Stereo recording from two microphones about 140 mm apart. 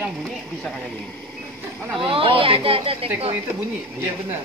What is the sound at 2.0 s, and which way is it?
Speech, 40° right (ahead or behind).